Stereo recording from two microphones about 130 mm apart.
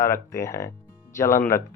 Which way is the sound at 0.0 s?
20° left (ahead or behind).